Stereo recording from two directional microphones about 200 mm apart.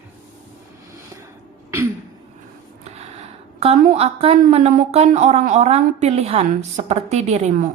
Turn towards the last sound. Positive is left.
turn(degrees=-35)  # may be behind; listen again after turning